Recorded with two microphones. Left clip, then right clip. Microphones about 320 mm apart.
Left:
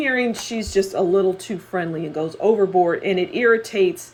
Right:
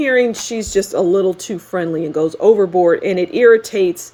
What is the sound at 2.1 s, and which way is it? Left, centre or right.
Speech, right.